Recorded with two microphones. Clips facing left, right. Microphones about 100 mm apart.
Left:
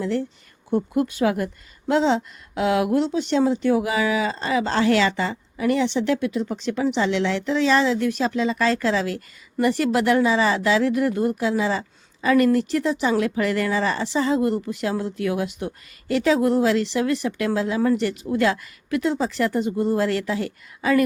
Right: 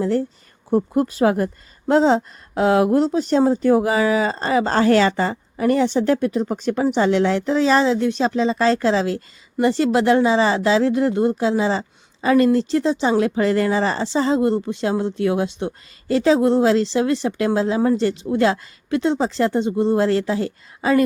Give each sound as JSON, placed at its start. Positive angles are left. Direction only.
{"t": 0.0, "sound": "speech", "side_deg": -40}